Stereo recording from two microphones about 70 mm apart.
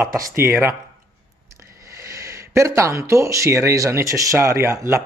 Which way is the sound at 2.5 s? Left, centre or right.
Right.